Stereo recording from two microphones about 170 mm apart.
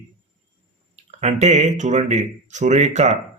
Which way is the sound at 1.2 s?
40° right (ahead or behind).